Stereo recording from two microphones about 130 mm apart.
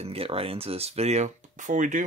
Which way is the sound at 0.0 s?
50° right (ahead or behind).